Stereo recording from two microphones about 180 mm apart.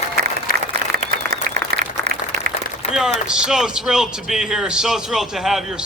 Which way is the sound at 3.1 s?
5° right (ahead or behind).